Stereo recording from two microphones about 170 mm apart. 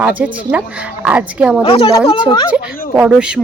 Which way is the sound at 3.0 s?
5° right (ahead or behind).